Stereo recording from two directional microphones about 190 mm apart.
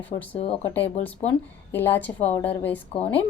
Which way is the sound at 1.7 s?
10° left (ahead or behind).